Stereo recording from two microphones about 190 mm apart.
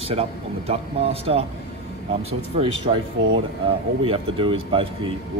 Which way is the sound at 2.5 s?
30° right (ahead or behind).